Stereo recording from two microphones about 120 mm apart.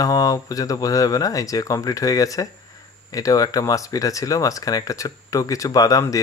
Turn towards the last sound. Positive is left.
turn(degrees=30)  # may be behind; listen again after turning